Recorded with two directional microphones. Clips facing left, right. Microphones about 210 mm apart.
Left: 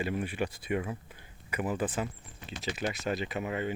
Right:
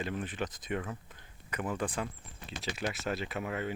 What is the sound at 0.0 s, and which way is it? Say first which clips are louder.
Speech: left 4 dB; 10° left (ahead or behind).